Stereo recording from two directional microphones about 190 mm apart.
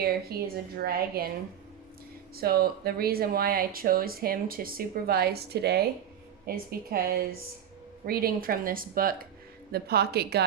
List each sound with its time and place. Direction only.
0.0 s speech: 55° right (ahead or behind)
2.3 s a woman's voice: 55° right (ahead or behind)